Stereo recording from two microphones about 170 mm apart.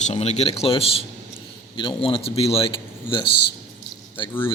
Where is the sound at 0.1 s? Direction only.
40° left (ahead or behind).